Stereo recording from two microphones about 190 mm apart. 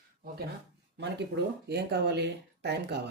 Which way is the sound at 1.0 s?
65° right (ahead or behind).